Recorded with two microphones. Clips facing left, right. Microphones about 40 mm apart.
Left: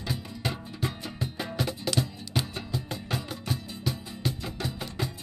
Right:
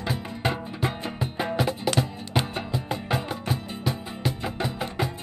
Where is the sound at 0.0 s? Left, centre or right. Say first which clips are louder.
Right 5 dB; right.